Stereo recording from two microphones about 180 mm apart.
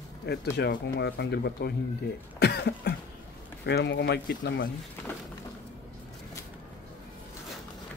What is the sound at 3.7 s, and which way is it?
Speech, 70° left (ahead or behind).